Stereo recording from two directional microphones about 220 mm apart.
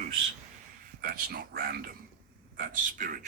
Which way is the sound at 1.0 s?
45° right (ahead or behind).